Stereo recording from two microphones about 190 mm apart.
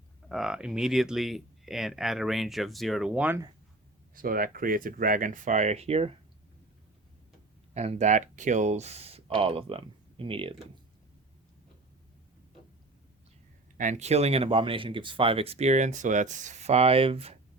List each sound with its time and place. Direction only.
0.3 s speech: centre (ahead or behind)
4.1 s speech: 45° right (ahead or behind)
7.7 s speech: 35° right (ahead or behind)
13.7 s speech: 40° right (ahead or behind)